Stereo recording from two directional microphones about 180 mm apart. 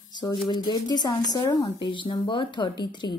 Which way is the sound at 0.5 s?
25° left (ahead or behind).